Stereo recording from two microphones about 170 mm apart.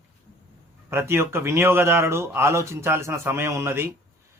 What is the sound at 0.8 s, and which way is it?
Speech, 15° right (ahead or behind).